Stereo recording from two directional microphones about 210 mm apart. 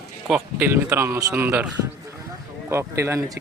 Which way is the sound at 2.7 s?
15° right (ahead or behind).